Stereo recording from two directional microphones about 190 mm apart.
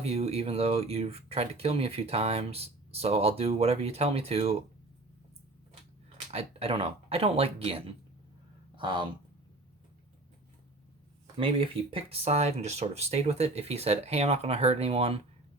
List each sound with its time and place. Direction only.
0.0 s speech: 35° right (ahead or behind)
6.1 s speech: 30° right (ahead or behind)
8.7 s a sound: 25° right (ahead or behind)
11.3 s speech: 30° right (ahead or behind)